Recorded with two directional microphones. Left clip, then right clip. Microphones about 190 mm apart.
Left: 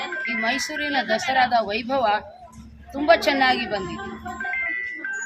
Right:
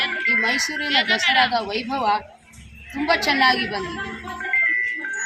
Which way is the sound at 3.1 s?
35° left (ahead or behind).